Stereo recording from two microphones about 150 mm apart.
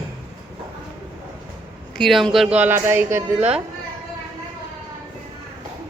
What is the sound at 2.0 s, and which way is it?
A woman's voice, centre (ahead or behind).